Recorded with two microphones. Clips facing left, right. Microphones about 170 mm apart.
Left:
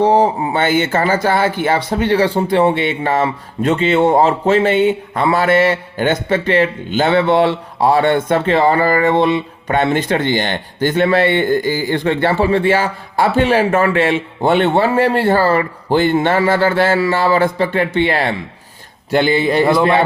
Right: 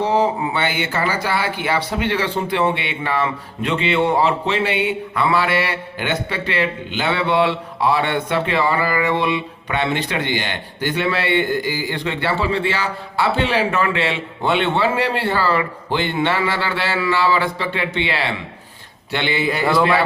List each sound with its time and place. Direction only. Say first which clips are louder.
0.0 s speech: left 6 dB; 20° left (ahead or behind)
0.5 s speech: left 7 dB; 45° left (ahead or behind)